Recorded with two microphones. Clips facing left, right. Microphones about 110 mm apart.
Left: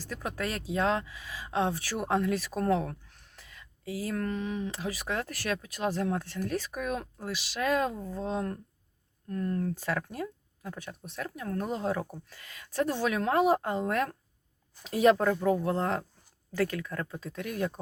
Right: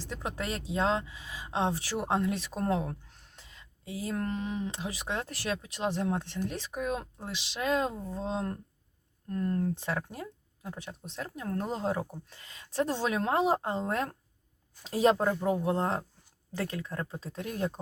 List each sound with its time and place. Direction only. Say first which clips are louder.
0.0 s speech: left 1 dB; 25° right (ahead or behind)